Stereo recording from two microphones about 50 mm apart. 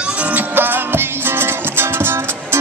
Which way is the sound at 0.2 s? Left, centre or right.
Right.